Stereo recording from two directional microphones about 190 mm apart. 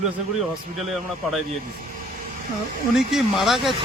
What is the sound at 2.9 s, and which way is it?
Speech, centre (ahead or behind).